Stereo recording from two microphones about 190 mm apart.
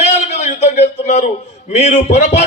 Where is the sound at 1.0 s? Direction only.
35° left (ahead or behind).